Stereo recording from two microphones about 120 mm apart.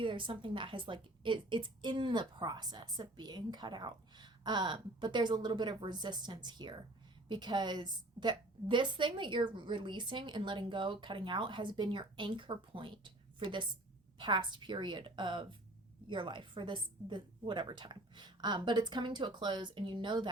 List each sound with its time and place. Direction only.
0.0 s a woman's voice: 45° right (ahead or behind)